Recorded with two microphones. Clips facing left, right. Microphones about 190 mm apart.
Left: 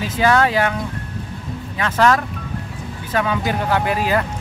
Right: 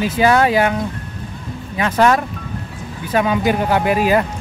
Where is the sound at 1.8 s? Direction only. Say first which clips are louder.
Right 2 dB; 15° right (ahead or behind).